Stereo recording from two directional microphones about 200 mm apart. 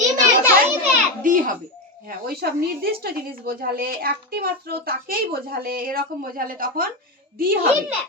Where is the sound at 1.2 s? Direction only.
40° right (ahead or behind).